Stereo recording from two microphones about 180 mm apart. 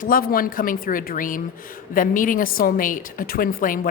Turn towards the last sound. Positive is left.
turn(degrees=50)  # may be behind; listen again after turning